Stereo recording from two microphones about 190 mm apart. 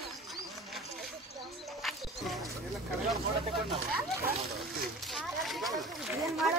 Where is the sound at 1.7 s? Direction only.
Centre (ahead or behind).